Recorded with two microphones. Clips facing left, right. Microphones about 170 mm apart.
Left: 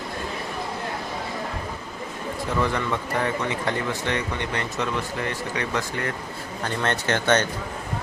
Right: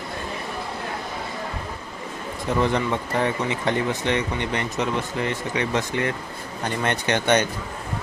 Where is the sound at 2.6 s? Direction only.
20° right (ahead or behind).